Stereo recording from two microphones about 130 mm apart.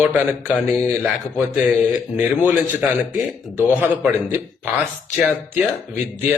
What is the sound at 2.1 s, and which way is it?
A man's voice, 15° right (ahead or behind).